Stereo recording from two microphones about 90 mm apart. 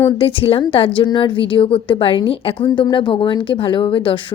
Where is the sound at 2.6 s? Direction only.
55° left (ahead or behind).